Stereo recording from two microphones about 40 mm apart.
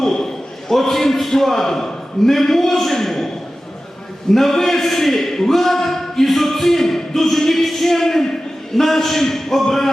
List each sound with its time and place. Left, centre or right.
0.0 s a sound: centre
0.7 s a man's voice: centre
4.4 s a man's voice: centre